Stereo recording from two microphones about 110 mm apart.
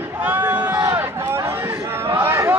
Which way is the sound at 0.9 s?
20° right (ahead or behind).